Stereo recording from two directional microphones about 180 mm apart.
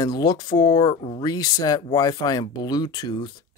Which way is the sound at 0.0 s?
20° left (ahead or behind).